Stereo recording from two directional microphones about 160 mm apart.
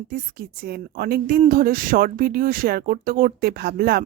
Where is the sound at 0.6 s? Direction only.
75° right (ahead or behind).